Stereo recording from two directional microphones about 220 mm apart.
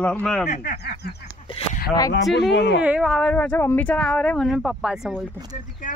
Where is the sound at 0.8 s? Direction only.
45° left (ahead or behind).